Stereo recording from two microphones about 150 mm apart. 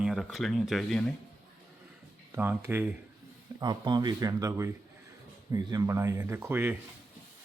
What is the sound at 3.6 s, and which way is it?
Speech, 30° right (ahead or behind).